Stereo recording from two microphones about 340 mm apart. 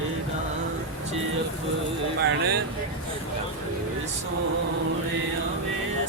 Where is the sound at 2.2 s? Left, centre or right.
Right.